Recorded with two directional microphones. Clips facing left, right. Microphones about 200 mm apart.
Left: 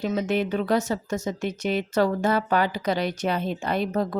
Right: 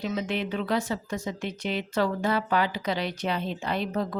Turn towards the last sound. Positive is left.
turn(degrees=45)  # may be behind; listen again after turning